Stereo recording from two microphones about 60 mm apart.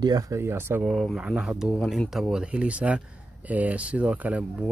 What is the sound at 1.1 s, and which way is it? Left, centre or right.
Speech, centre.